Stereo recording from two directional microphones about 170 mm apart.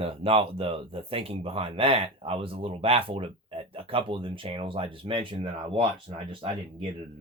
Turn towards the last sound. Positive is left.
turn(degrees=-30)  # may be behind; listen again after turning